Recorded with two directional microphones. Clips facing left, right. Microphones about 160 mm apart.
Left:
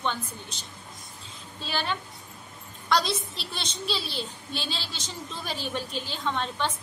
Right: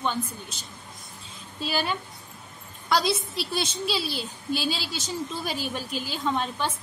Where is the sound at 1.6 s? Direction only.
10° right (ahead or behind).